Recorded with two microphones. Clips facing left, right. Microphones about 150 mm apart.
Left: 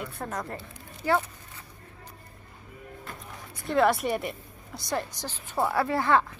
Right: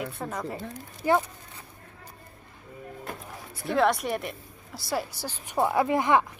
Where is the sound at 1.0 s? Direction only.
20° right (ahead or behind).